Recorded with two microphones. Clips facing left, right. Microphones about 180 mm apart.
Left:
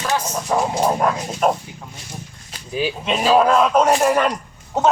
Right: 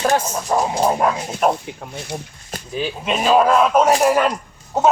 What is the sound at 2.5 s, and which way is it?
Sheep, 45° right (ahead or behind).